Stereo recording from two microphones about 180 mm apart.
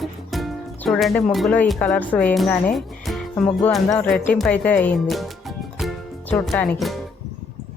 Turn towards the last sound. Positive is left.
turn(degrees=5)  # may be behind; listen again after turning